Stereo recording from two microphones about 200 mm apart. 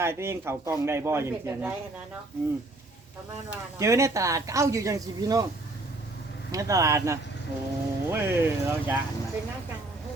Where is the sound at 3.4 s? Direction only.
15° right (ahead or behind).